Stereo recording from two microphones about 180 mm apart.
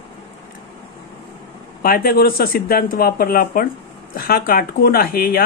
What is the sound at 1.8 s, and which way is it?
Speech, 55° left (ahead or behind).